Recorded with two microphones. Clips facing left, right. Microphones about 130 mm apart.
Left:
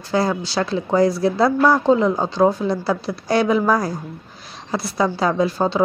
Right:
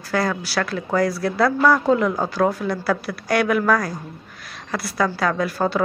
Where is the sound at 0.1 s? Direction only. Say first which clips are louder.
Left 2 dB; 25° left (ahead or behind).